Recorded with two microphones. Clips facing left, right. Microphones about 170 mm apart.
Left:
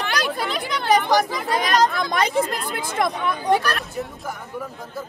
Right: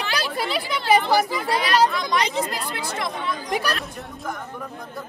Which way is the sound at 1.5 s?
45° left (ahead or behind).